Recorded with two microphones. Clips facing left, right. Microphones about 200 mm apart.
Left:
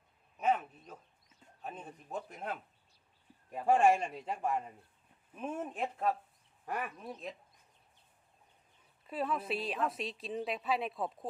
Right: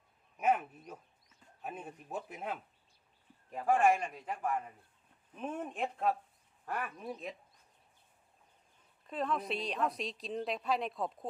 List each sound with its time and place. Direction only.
0.3 s a sound: 10° right (ahead or behind)
1.6 s speech: 10° right (ahead or behind)
3.9 s a man's voice: 25° left (ahead or behind)
5.3 s a woman's voice: 5° left (ahead or behind)
6.7 s speech: 15° left (ahead or behind)
6.9 s a woman's voice: centre (ahead or behind)
9.0 s a woman's voice: 5° left (ahead or behind)